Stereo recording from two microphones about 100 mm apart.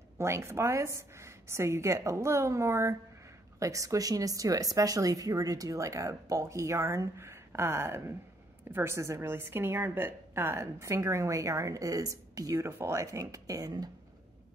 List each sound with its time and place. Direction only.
0.2 s a woman's voice: 30° right (ahead or behind)